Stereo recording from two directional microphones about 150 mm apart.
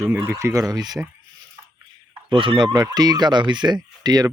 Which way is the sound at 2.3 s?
35° right (ahead or behind).